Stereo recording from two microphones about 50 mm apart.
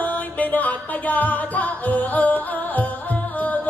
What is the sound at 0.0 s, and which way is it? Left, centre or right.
Music, left.